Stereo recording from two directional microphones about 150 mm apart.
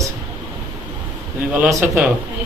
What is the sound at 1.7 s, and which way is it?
Speech, 15° right (ahead or behind).